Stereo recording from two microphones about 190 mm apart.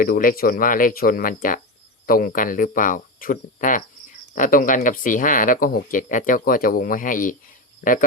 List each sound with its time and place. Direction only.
0.0 s speech: 50° left (ahead or behind)